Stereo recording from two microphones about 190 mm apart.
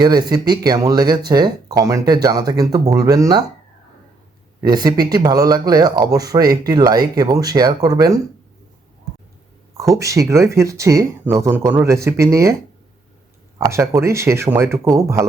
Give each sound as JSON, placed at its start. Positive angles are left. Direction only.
{"t": 0.0, "sound": "speech", "side_deg": -20}
{"t": 4.6, "sound": "speech", "side_deg": -20}
{"t": 9.7, "sound": "speech", "side_deg": -15}
{"t": 13.6, "sound": "speech", "side_deg": -15}